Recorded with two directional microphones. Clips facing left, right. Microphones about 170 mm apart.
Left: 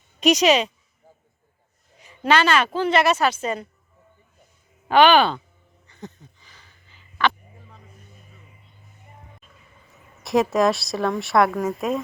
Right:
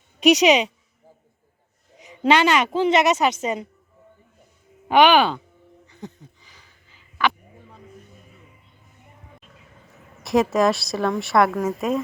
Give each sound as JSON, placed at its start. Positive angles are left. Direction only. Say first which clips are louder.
{"t": 0.4, "sound": "speech", "louder": "right 1 dB", "side_deg": -15}
{"t": 2.2, "sound": "speech", "louder": "right 1 dB", "side_deg": -20}
{"t": 4.9, "sound": "speech", "louder": "even", "side_deg": -15}
{"t": 5.9, "sound": "a sound", "louder": "right 1 dB", "side_deg": -10}
{"t": 10.2, "sound": "speech", "louder": "even", "side_deg": 0}